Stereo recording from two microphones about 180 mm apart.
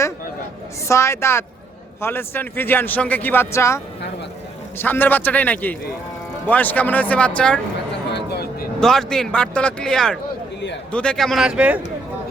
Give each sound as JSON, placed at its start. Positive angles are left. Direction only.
{"t": 0.9, "sound": "speech", "side_deg": 15}
{"t": 4.8, "sound": "speech", "side_deg": 10}
{"t": 8.1, "sound": "a sound", "side_deg": 65}
{"t": 8.8, "sound": "speech", "side_deg": 5}